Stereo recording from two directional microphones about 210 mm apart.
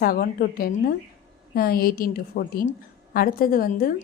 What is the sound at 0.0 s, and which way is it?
A woman's voice, 45° left (ahead or behind).